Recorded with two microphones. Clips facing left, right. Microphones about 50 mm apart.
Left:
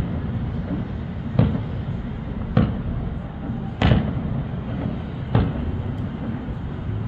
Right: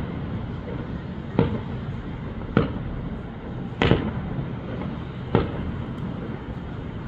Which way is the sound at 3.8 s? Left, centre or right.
Right.